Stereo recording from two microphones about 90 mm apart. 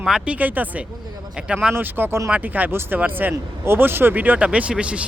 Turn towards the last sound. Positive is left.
turn(degrees=-15)  # may be behind; listen again after turning